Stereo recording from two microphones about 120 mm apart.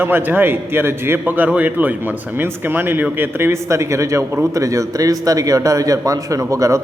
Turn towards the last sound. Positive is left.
turn(degrees=-25)  # may be behind; listen again after turning